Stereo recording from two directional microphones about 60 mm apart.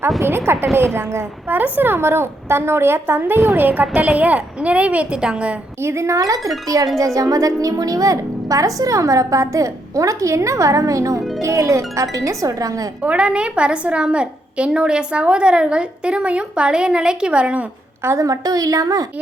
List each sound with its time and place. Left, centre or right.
0.2 s a woman's voice: right
1.5 s a woman's voice: right
5.8 s a woman's voice: right
13.0 s a woman's voice: right
18.2 s a woman's voice: right